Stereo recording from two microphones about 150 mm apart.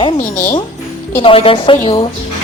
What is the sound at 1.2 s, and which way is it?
Speech, 35° left (ahead or behind).